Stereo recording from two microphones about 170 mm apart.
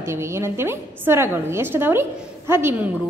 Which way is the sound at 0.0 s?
15° right (ahead or behind).